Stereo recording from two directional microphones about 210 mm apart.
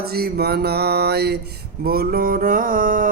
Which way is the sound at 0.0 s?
50° right (ahead or behind).